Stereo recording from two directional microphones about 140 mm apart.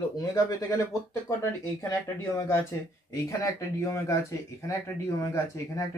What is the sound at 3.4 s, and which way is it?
Speech, 20° left (ahead or behind).